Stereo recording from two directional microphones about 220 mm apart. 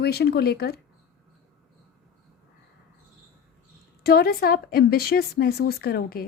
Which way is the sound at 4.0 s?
45° left (ahead or behind).